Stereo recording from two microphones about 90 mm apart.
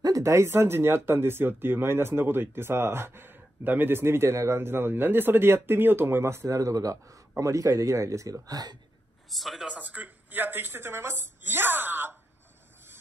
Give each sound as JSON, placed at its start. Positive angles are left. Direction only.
{"t": 0.0, "sound": "speech", "side_deg": -35}
{"t": 9.3, "sound": "a man's voice", "side_deg": 0}
{"t": 9.7, "sound": "speech", "side_deg": -15}